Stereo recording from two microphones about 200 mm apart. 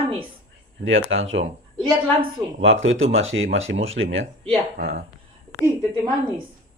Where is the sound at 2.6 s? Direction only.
75° right (ahead or behind).